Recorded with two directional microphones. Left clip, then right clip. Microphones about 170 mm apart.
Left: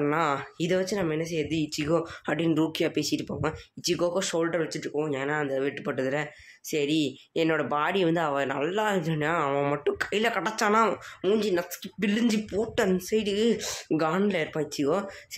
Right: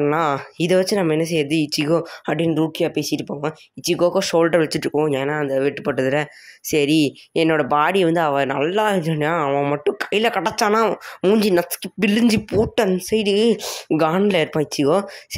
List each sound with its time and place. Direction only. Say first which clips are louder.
0.0 s speech: right 7 dB; 30° right (ahead or behind)
11.1 s speech: right 10 dB; 50° right (ahead or behind)